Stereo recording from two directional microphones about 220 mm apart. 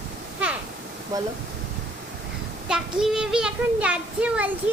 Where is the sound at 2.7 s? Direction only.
5° right (ahead or behind).